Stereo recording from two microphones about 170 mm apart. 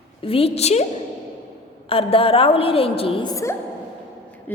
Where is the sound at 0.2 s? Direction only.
35° left (ahead or behind).